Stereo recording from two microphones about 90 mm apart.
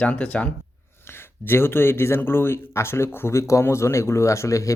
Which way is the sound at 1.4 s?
25° left (ahead or behind).